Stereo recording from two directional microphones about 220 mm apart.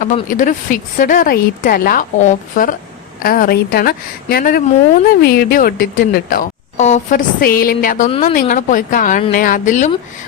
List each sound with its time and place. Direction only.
0.0 s a woman's voice: 35° left (ahead or behind)